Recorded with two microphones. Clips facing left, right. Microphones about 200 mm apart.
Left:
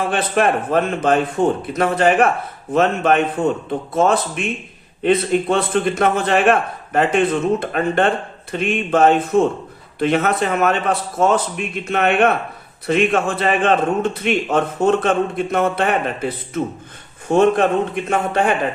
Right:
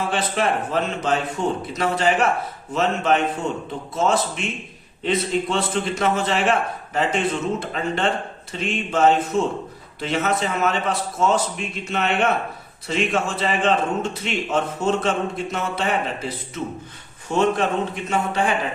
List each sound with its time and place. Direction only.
0.1 s a man's voice: 55° left (ahead or behind)
17.2 s a man's voice: 55° left (ahead or behind)